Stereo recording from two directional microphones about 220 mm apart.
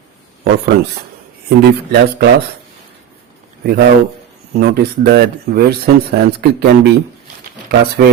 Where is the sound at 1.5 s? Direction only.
45° right (ahead or behind).